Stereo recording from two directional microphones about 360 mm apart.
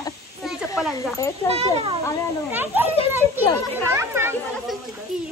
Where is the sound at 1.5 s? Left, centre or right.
Centre.